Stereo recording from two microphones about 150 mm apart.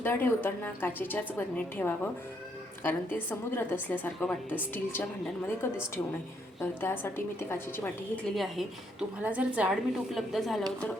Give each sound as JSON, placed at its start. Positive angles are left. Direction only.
{"t": 0.0, "sound": "a woman's voice", "side_deg": 15}